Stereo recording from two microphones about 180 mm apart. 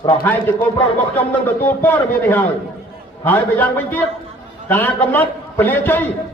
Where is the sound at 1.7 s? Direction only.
10° left (ahead or behind).